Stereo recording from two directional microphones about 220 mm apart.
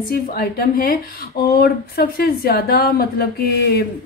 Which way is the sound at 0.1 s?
40° left (ahead or behind).